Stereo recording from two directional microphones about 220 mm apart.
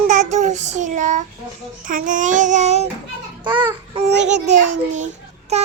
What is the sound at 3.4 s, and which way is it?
Babbling, 20° right (ahead or behind).